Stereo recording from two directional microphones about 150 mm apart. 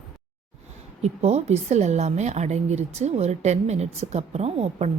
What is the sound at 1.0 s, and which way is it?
A woman's voice, 45° right (ahead or behind).